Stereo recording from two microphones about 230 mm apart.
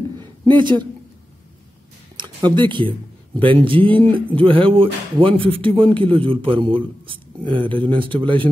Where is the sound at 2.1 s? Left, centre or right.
Centre.